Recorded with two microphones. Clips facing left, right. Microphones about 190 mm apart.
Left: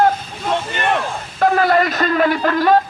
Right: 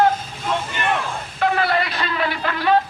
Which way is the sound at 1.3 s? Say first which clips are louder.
Left 6 dB; 40° left (ahead or behind).